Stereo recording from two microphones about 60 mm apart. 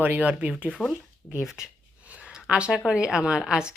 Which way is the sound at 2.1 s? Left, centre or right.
Centre.